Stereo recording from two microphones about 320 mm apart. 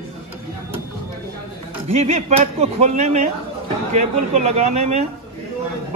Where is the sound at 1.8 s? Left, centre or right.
Centre.